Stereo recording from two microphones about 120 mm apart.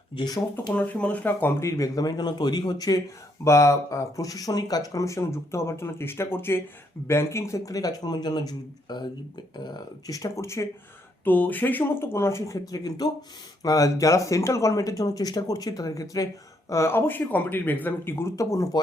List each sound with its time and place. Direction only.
0.2 s speech: 35° left (ahead or behind)
0.7 s speech: 10° left (ahead or behind); by 18.8 s 30° left (ahead or behind)